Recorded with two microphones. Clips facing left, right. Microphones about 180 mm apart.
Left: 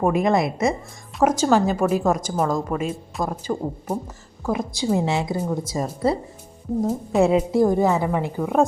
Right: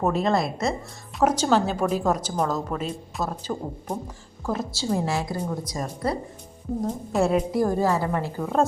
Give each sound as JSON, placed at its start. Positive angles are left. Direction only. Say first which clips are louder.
{"t": 0.0, "sound": "a woman's voice", "louder": "left 3 dB", "side_deg": 15}
{"t": 6.8, "sound": "a woman's voice", "louder": "left 5 dB", "side_deg": 0}
{"t": 7.3, "sound": "a woman's voice", "louder": "left 4 dB", "side_deg": 20}